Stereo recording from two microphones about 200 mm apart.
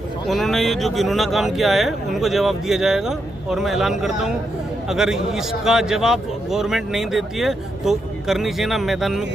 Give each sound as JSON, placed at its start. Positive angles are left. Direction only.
{"t": 0.3, "sound": "a man's voice", "side_deg": 0}